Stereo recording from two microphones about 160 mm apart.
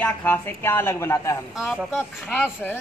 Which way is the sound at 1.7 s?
5° right (ahead or behind).